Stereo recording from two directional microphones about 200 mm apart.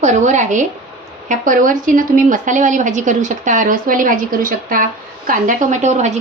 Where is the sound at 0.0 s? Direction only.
35° right (ahead or behind).